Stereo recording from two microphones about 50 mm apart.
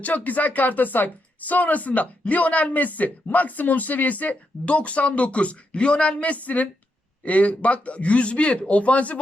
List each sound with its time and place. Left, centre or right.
0.0 s speech: left